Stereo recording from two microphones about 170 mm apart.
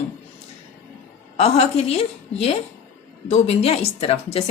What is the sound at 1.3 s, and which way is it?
Speech, 40° left (ahead or behind).